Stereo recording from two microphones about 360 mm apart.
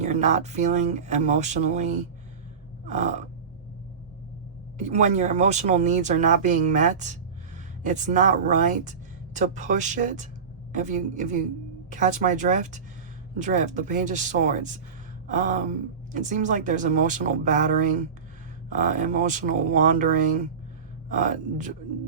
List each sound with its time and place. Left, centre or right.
0.0 s speech: centre
2.8 s gasp: centre
4.8 s speech: centre